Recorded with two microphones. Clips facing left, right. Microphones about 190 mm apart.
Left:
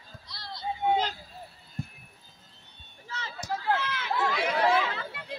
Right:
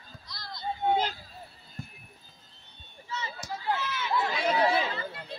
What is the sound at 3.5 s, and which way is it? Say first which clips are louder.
Chatter: left 3 dB; 90° left.